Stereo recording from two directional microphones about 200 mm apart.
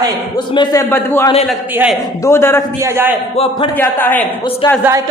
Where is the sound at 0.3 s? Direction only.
20° left (ahead or behind).